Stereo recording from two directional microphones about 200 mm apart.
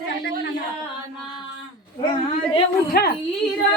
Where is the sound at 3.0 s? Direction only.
50° left (ahead or behind).